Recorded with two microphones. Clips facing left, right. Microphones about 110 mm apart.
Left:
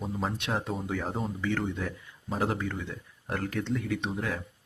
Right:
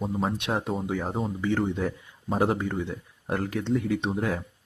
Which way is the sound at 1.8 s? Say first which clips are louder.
Right 6 dB; 40° right (ahead or behind).